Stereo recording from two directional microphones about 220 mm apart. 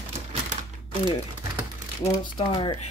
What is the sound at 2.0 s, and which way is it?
Speech, 20° left (ahead or behind).